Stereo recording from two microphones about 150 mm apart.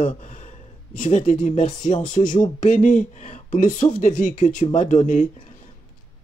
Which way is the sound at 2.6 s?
55° left (ahead or behind).